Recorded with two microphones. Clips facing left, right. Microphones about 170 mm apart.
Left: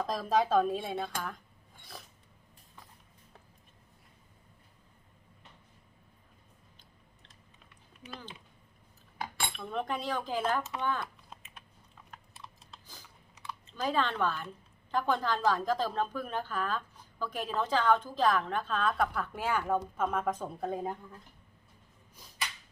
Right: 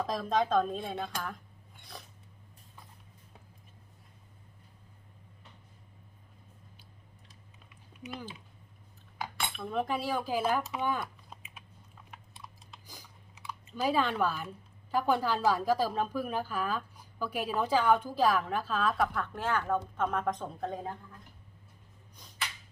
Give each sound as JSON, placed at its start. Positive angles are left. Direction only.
{"t": 0.0, "sound": "speech", "side_deg": 0}
{"t": 1.8, "sound": "a sound", "side_deg": 0}
{"t": 8.0, "sound": "speech", "side_deg": -15}
{"t": 9.6, "sound": "speech", "side_deg": -5}
{"t": 12.1, "sound": "typing", "side_deg": 0}
{"t": 12.9, "sound": "speech", "side_deg": -10}